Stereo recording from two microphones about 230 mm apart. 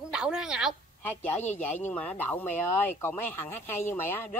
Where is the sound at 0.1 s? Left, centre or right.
Centre.